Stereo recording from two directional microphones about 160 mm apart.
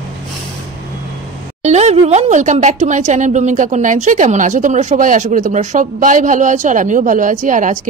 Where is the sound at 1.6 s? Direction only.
45° right (ahead or behind).